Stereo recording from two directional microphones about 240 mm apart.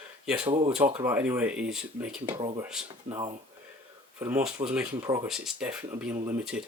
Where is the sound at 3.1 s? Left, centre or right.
Centre.